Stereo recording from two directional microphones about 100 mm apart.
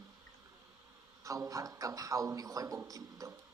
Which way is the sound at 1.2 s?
35° right (ahead or behind).